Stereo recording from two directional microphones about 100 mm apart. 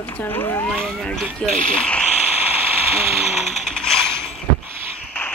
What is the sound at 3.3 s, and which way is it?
Music, 90° left.